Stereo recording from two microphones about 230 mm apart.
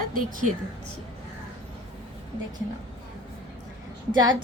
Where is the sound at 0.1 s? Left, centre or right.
Right.